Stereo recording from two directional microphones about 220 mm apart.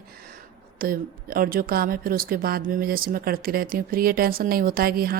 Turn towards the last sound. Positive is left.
turn(degrees=-40)  # may be behind; listen again after turning